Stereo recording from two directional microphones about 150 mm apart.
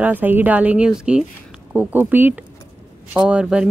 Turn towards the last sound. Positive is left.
turn(degrees=-5)  # may be behind; listen again after turning